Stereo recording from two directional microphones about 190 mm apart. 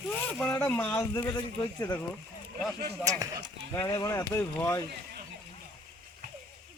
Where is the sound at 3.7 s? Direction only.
15° left (ahead or behind).